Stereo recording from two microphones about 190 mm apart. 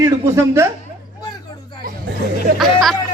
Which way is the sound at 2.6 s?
Centre (ahead or behind).